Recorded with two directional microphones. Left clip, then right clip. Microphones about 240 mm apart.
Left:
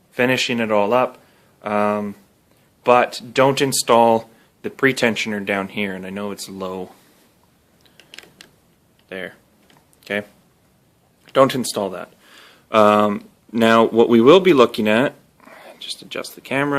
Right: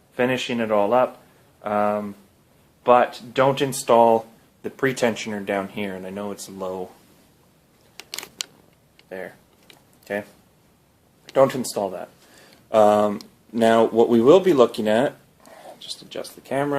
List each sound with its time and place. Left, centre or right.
0.1 s speech: left
9.0 s speech: left
11.3 s speech: left